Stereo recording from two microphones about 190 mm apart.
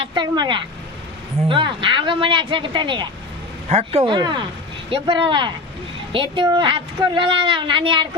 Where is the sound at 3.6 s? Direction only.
35° right (ahead or behind).